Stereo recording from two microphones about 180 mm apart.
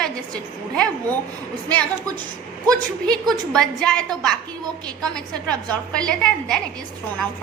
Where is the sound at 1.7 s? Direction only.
10° left (ahead or behind).